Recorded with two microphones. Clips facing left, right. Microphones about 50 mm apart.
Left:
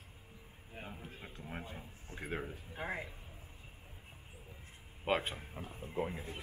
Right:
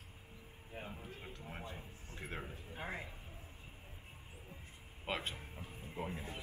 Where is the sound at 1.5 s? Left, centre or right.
Centre.